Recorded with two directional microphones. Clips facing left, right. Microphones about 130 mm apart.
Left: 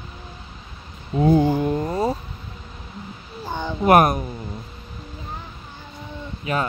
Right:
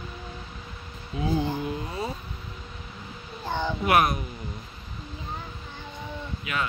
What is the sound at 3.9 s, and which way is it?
Speech, 45° left (ahead or behind).